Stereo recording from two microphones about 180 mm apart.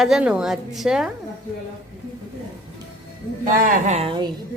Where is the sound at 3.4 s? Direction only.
45° right (ahead or behind).